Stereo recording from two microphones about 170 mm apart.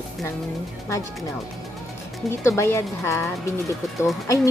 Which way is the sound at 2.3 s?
15° left (ahead or behind).